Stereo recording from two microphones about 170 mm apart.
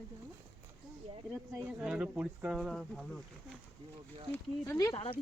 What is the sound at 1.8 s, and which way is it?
Speech, 5° right (ahead or behind).